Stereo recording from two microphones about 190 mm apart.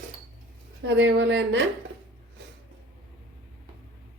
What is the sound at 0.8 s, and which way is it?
Speech, 65° right (ahead or behind).